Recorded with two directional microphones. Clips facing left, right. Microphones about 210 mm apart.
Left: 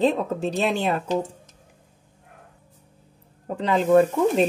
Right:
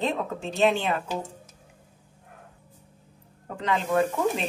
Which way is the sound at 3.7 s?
40° left (ahead or behind).